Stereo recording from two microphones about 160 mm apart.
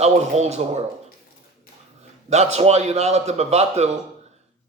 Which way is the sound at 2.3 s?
45° right (ahead or behind).